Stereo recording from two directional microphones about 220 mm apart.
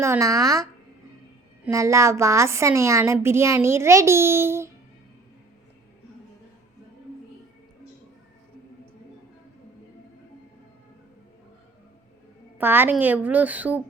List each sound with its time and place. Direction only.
0.0 s a woman's voice: 15° right (ahead or behind)
12.5 s a woman's voice: 10° right (ahead or behind)